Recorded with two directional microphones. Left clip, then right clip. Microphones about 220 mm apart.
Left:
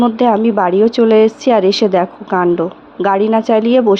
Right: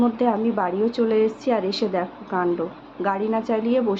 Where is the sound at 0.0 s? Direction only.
40° left (ahead or behind).